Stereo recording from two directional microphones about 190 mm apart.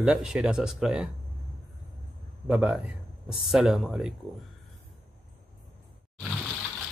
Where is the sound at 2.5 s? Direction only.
5° right (ahead or behind).